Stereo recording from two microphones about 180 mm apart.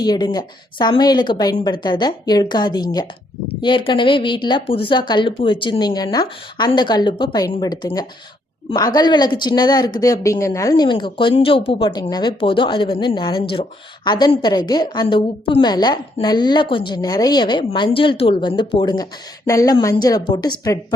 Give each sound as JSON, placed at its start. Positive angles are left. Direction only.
{"t": 0.0, "sound": "a woman's voice", "side_deg": 20}